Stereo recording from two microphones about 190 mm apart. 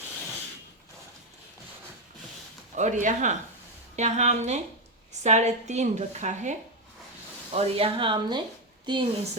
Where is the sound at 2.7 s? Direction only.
40° right (ahead or behind); by 9.0 s 25° right (ahead or behind).